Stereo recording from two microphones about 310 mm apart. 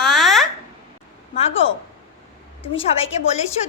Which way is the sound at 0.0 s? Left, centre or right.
Centre.